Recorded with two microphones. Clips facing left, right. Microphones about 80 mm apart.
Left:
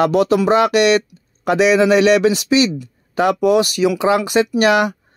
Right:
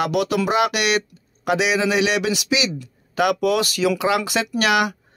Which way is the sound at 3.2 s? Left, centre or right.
Left.